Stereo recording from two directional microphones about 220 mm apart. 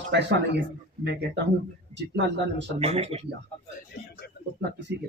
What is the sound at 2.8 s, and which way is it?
Speech, 25° right (ahead or behind).